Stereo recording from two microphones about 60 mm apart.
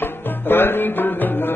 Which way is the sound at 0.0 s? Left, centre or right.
Left.